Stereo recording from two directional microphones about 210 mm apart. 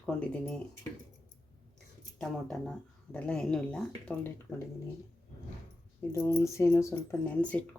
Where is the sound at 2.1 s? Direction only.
Centre (ahead or behind).